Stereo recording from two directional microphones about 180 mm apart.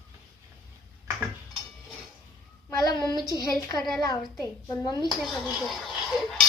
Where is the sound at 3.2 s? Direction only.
20° left (ahead or behind).